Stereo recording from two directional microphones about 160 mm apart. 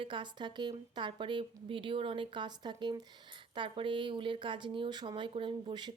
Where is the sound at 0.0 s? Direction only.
30° right (ahead or behind).